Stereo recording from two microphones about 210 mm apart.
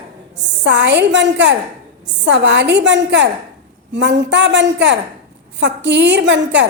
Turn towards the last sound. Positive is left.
turn(degrees=-60)  # may be behind; listen again after turning